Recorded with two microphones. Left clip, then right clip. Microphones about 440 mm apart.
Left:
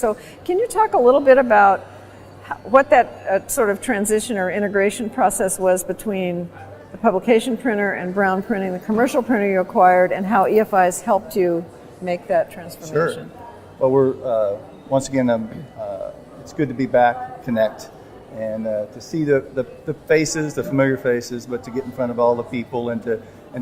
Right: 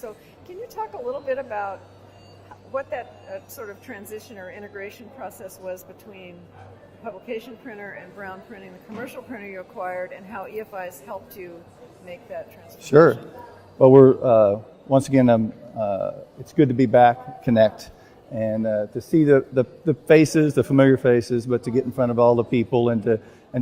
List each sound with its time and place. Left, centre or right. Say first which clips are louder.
0.0 s a woman's voice: left 16 dB; left
12.8 s a woman's voice: right 6 dB; right
16.6 s a man's voice: right 1 dB; right
18.3 s a man's voice: even; right